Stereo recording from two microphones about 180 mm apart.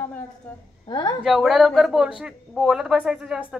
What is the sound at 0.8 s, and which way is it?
Speech, 25° left (ahead or behind).